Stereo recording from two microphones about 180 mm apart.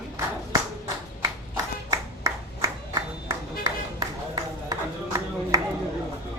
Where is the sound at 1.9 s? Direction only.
20° right (ahead or behind).